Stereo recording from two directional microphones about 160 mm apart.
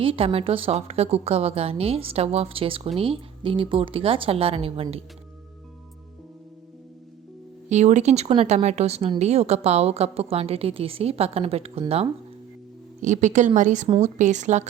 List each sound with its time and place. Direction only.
0.0 s a woman's voice: 35° right (ahead or behind)
7.7 s a woman's voice: 45° right (ahead or behind)
13.0 s a woman's voice: 50° right (ahead or behind)